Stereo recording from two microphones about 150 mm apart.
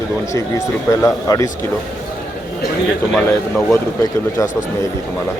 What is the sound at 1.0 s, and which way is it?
Speech, 20° left (ahead or behind).